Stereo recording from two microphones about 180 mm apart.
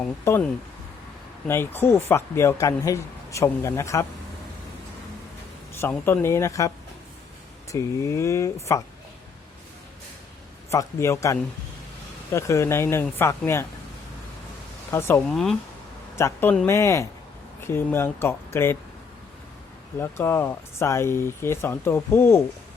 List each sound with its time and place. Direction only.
0.0 s speech: 10° left (ahead or behind)
1.5 s speech: 10° left (ahead or behind)
5.7 s speech: 15° left (ahead or behind)
10.7 s speech: 15° left (ahead or behind)
14.8 s speech: 15° left (ahead or behind)
15.3 s speech: centre (ahead or behind)
16.1 s speech: 15° left (ahead or behind)
20.0 s speech: 15° left (ahead or behind)